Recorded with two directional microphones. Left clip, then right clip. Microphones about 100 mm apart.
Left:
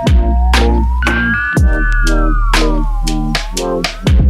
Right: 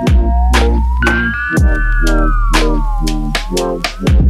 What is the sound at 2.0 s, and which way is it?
Music, 10° left (ahead or behind).